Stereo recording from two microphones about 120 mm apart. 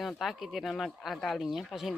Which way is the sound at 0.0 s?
Centre (ahead or behind).